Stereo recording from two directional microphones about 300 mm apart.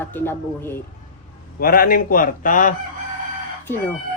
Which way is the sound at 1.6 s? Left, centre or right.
Left.